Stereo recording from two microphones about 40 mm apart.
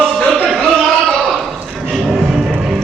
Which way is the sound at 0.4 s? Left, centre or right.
Centre.